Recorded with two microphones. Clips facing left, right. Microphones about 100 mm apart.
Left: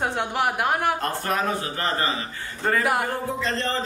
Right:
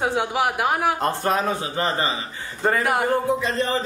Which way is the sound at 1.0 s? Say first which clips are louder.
Right 3 dB; 20° right (ahead or behind).